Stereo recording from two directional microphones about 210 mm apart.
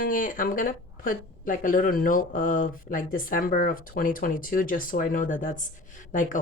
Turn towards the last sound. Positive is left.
turn(degrees=40)  # may be behind; listen again after turning